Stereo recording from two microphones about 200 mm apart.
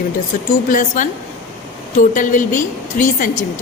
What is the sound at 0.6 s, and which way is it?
A woman's voice, 40° left (ahead or behind).